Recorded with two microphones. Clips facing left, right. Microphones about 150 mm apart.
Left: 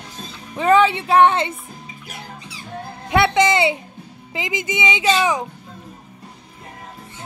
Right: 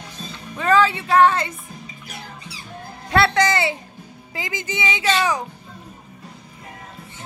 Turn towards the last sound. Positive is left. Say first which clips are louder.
# left 2 dB
turn(degrees=20)  # may be behind; listen again after turning